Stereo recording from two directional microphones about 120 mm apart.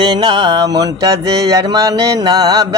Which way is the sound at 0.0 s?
40° right (ahead or behind).